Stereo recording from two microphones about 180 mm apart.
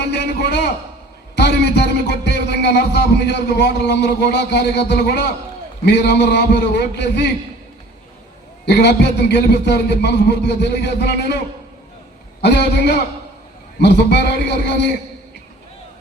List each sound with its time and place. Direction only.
0.0 s speech: 70° left (ahead or behind)
8.6 s speech: 70° left (ahead or behind)
12.4 s speech: 70° left (ahead or behind)